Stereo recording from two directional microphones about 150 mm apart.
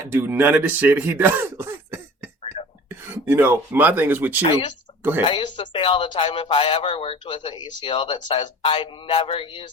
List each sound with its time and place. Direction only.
0.1 s speech: 15° right (ahead or behind)
2.4 s whispering: 40° left (ahead or behind)
2.9 s speech: 15° right (ahead or behind)
4.4 s speech: 30° left (ahead or behind)